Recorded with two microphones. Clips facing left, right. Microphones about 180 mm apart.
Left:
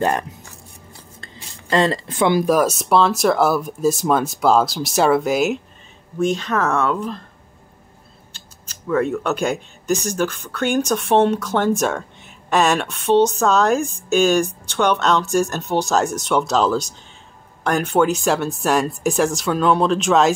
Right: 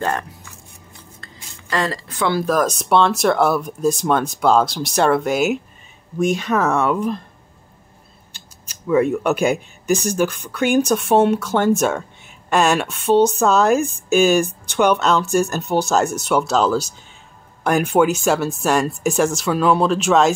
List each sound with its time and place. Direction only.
0.0 s speech: 15° left (ahead or behind); by 7.2 s 15° right (ahead or behind)
8.3 s speech: 10° right (ahead or behind)